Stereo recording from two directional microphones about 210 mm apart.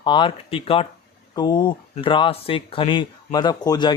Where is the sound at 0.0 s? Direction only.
25° left (ahead or behind).